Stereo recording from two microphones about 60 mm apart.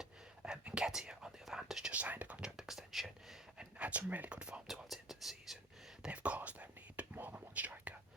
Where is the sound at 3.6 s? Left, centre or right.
Right.